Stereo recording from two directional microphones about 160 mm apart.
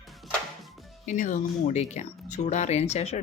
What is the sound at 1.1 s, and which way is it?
Speech, 55° left (ahead or behind).